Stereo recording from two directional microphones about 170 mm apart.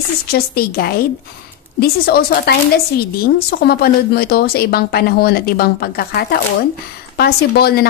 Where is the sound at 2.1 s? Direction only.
65° left (ahead or behind).